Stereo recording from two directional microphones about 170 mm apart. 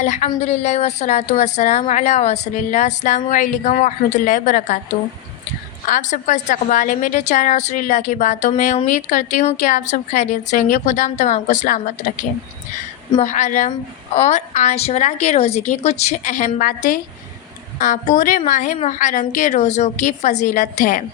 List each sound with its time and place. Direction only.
0.0 s a woman's voice: 45° left (ahead or behind)
5.9 s a woman's voice: 45° left (ahead or behind)
13.1 s a woman's voice: 45° left (ahead or behind)